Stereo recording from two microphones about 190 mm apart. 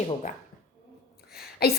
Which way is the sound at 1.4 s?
55° left (ahead or behind).